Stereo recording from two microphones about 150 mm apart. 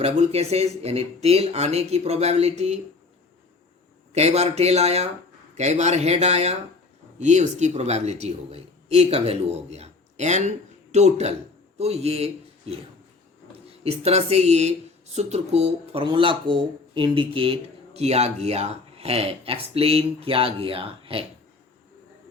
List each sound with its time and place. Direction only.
0.0 s a man's voice: 45° right (ahead or behind)
4.1 s a man's voice: 45° right (ahead or behind)